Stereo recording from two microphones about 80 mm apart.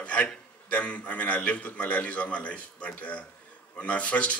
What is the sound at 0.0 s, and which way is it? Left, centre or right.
A man's voice, centre.